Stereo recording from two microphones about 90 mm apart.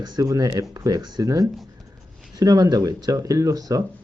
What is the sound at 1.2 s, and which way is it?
Speech, 40° right (ahead or behind).